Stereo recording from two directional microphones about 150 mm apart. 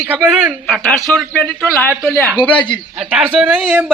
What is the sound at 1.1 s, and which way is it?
A man's voice, 10° left (ahead or behind).